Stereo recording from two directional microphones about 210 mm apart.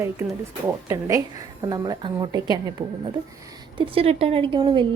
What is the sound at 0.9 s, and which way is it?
A woman's voice, 15° right (ahead or behind).